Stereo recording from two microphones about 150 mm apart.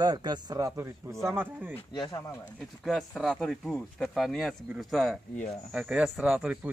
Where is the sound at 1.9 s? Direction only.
25° left (ahead or behind).